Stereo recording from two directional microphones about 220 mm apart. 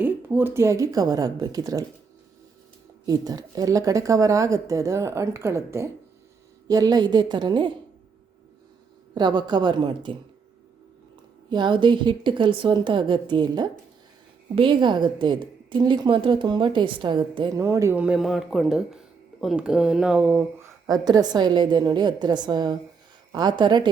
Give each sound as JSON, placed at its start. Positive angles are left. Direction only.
{"t": 0.0, "sound": "a woman's voice", "side_deg": -10}
{"t": 3.1, "sound": "a woman's voice", "side_deg": -15}
{"t": 9.1, "sound": "a woman's voice", "side_deg": -20}
{"t": 11.4, "sound": "a woman's voice", "side_deg": -20}